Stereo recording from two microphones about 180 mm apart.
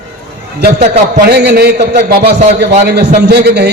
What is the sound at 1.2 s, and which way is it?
A man's voice, 65° right (ahead or behind).